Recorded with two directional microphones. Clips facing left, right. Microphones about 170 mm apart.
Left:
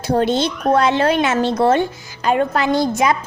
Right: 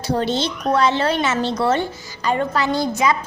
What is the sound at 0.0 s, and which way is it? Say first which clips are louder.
Speech: left 4 dB; 55° left (ahead or behind).